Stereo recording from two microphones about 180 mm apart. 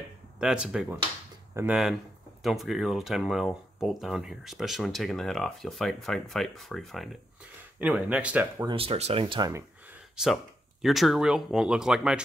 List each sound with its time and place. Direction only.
0.4 s speech: 5° right (ahead or behind)
2.4 s speech: centre (ahead or behind)
8.6 s speech: 30° right (ahead or behind)
9.5 s a sound: 15° right (ahead or behind)
10.1 s speech: centre (ahead or behind)